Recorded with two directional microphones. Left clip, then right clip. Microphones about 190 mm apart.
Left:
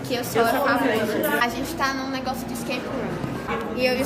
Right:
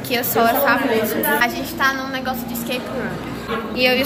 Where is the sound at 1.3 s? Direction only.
Centre (ahead or behind).